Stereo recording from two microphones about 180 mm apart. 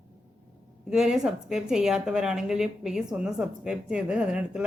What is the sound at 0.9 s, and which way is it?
Speech, 5° right (ahead or behind).